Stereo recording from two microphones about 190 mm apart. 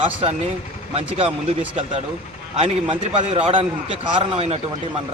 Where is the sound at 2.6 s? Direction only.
30° right (ahead or behind).